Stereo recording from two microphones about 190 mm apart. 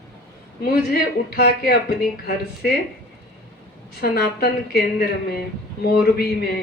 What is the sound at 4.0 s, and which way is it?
Speech, 55° left (ahead or behind).